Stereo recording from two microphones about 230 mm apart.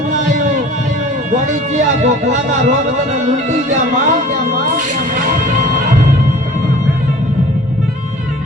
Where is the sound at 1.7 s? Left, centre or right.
Right.